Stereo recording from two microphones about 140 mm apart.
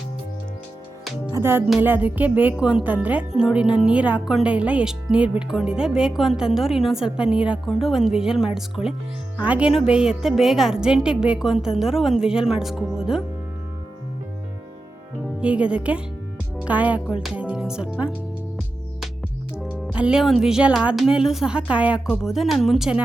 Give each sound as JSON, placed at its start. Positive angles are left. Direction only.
{"t": 1.3, "sound": "speech", "side_deg": -15}
{"t": 15.4, "sound": "speech", "side_deg": -10}
{"t": 19.9, "sound": "speech", "side_deg": -5}